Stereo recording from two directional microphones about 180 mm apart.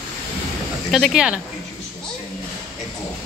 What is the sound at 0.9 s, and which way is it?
Speech, centre (ahead or behind).